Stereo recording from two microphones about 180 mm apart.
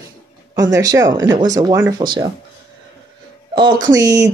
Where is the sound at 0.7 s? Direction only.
20° right (ahead or behind).